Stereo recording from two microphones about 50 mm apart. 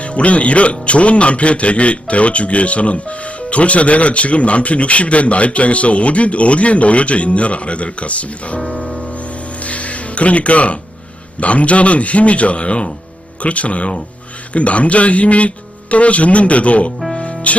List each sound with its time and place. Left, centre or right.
0.0 s a man's voice: left